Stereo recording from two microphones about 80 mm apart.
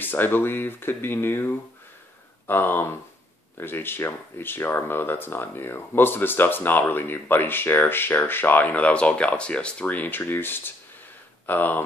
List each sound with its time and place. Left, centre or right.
0.0 s speech: left